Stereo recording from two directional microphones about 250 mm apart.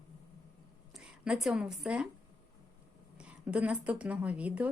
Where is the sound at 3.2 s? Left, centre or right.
Centre.